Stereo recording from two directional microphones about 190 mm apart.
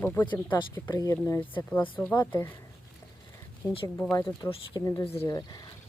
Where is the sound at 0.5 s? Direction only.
20° left (ahead or behind).